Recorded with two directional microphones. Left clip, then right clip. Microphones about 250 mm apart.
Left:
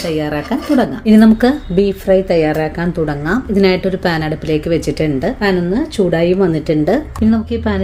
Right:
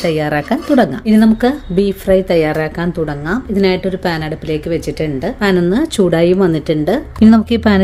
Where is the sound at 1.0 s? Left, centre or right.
Centre.